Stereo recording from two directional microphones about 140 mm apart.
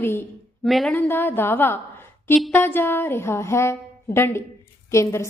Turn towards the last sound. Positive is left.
turn(degrees=20)  # may be behind; listen again after turning